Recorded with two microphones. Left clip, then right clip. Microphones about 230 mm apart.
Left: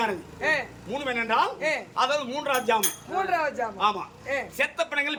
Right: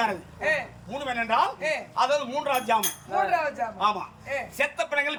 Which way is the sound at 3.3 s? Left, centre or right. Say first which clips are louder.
Even; centre.